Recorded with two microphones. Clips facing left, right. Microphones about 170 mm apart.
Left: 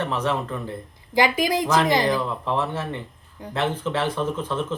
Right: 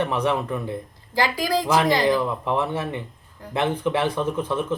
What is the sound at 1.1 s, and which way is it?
Speech, 20° left (ahead or behind).